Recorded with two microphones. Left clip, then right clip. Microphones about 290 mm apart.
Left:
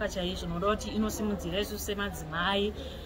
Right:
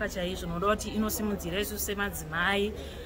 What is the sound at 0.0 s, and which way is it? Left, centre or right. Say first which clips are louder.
A woman's voice: even; centre.